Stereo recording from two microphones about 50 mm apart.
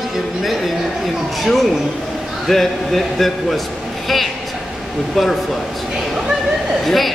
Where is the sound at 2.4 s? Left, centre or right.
Centre.